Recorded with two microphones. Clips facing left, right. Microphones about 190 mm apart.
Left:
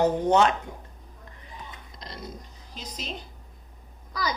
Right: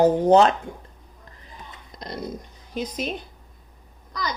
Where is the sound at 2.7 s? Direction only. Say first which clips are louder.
Right 11 dB; 55° right (ahead or behind).